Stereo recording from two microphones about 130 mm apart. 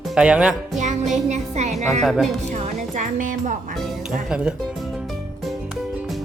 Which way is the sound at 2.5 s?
75° right (ahead or behind).